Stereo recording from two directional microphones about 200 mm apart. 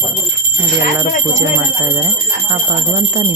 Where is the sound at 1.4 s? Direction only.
15° right (ahead or behind).